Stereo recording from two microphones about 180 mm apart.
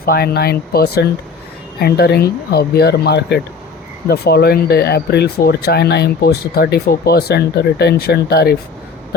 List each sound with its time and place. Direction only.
0.0 s speech: 60° left (ahead or behind)